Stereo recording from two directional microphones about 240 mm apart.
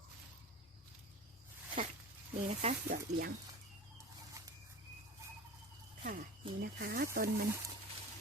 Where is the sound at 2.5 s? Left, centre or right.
Right.